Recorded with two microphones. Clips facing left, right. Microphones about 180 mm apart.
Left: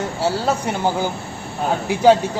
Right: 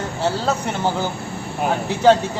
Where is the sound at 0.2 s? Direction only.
10° left (ahead or behind).